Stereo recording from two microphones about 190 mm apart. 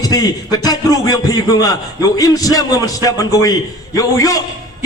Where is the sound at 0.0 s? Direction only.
20° left (ahead or behind).